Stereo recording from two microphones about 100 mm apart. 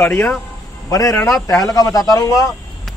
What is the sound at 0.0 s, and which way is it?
Speech, 20° left (ahead or behind).